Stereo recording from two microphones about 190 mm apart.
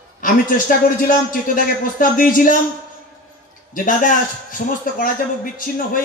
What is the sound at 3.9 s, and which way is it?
A man's voice, 45° left (ahead or behind).